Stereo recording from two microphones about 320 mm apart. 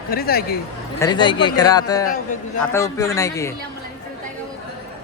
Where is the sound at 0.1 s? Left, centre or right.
Left.